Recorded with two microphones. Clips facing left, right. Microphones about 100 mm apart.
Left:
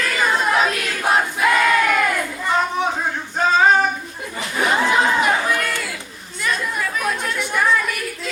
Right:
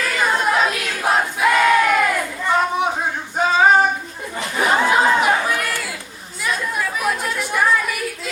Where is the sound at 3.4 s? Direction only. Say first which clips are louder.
Even; 10° right (ahead or behind).